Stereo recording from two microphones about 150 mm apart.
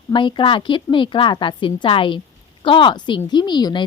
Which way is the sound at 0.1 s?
30° left (ahead or behind).